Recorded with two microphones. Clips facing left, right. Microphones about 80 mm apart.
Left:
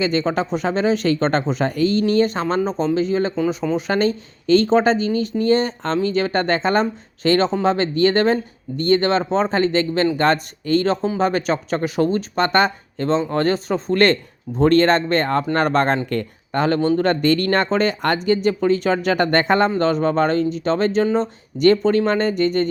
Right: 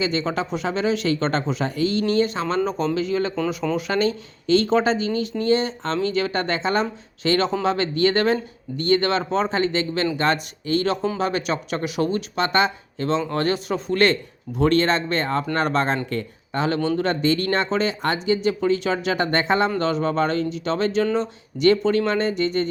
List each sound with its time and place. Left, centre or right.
0.0 s speech: left
13.3 s speech: left
18.4 s speech: left